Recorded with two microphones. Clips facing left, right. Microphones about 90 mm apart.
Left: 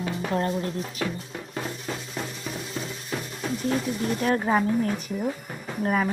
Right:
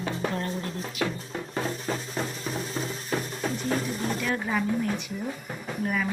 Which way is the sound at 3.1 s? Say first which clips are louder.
Right 3 dB; 40° right (ahead or behind).